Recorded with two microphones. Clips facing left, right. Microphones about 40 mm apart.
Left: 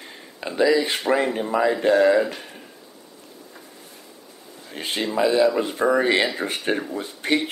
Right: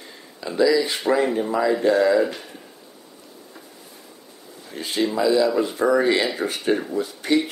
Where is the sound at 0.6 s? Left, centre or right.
Left.